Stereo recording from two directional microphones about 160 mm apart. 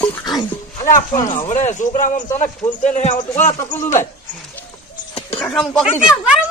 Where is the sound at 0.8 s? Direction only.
55° left (ahead or behind).